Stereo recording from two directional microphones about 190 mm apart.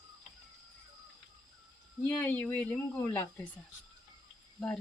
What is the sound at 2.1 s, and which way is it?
Speech, 10° left (ahead or behind).